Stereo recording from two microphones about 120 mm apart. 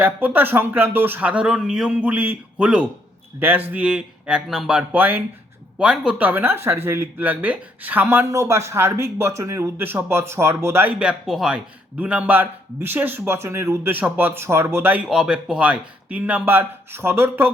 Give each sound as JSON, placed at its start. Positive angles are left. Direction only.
{"t": 0.0, "sound": "a man's voice", "side_deg": -15}
{"t": 11.0, "sound": "a man's voice", "side_deg": -5}